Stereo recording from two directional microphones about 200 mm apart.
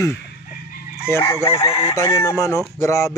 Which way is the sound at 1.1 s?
15° left (ahead or behind).